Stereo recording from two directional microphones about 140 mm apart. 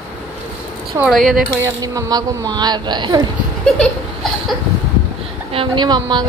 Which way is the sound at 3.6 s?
Centre (ahead or behind).